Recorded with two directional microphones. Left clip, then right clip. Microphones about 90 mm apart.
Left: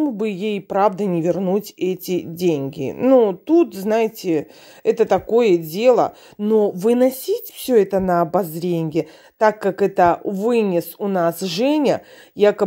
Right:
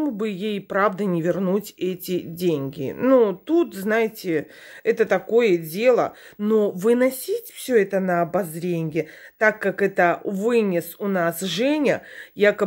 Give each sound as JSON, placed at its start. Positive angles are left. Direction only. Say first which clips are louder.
{"t": 0.2, "sound": "speech", "louder": "left 4 dB", "side_deg": 45}
{"t": 3.0, "sound": "a woman's voice", "louder": "left 3 dB", "side_deg": 30}
{"t": 6.4, "sound": "speech", "louder": "left 3 dB", "side_deg": 30}
{"t": 6.9, "sound": "a woman's voice", "louder": "left 1 dB", "side_deg": 50}